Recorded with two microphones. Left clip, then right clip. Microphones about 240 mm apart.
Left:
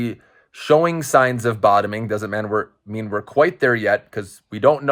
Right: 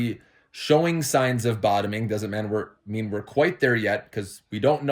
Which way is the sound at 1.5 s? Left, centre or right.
Left.